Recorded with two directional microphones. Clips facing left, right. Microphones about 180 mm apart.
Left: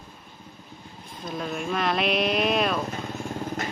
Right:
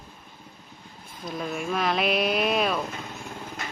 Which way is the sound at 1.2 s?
Centre (ahead or behind).